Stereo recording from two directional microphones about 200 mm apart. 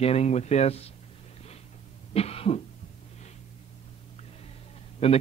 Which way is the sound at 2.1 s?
30° left (ahead or behind).